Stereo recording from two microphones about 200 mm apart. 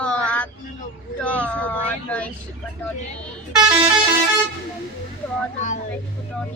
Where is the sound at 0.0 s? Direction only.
5° left (ahead or behind).